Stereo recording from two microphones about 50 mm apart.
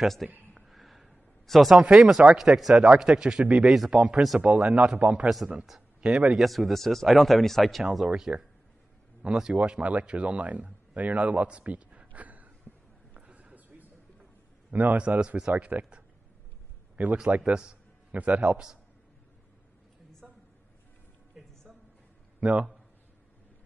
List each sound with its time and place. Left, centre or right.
0.0 s speech: centre
0.6 s a sound: centre
2.0 s a man's voice: centre
3.9 s speech: right
5.2 s speech: centre
5.9 s a sound: centre
6.3 s speech: centre
8.3 s a man's voice: right
9.6 s a man's voice: right
13.1 s a sound: right
14.7 s a man's voice: right
22.4 s a man's voice: right